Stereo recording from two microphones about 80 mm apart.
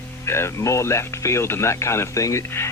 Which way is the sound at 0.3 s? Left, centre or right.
Left.